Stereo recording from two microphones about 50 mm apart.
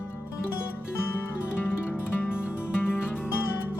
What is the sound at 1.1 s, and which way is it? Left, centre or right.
Music, left.